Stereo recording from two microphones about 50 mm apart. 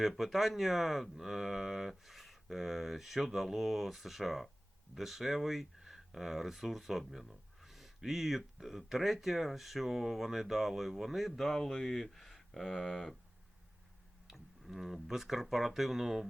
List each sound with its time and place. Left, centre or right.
0.0 s speech: centre
14.3 s speech: centre